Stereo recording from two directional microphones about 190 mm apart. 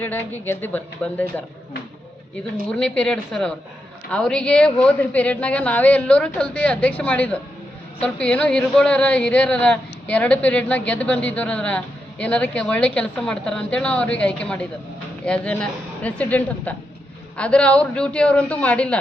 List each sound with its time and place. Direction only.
0.0 s speech: 10° left (ahead or behind)
2.7 s a woman's voice: 5° left (ahead or behind)